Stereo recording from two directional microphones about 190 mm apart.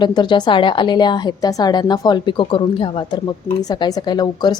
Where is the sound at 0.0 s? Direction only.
25° left (ahead or behind).